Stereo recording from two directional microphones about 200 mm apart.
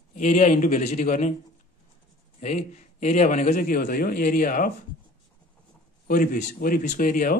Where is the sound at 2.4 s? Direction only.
35° left (ahead or behind).